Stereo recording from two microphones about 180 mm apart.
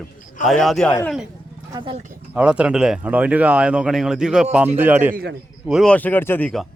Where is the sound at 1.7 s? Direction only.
30° right (ahead or behind).